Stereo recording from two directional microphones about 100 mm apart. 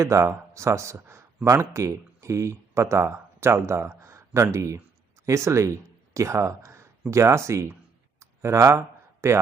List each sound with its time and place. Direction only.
0.0 s speech: 30° right (ahead or behind)
8.2 s a sound: 30° right (ahead or behind)
9.2 s speech: 30° right (ahead or behind)